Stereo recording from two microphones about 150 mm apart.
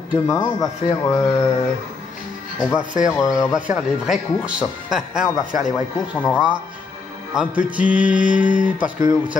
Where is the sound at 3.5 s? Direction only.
5° right (ahead or behind).